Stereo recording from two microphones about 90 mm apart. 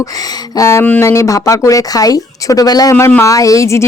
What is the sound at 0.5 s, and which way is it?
Speech, 35° left (ahead or behind).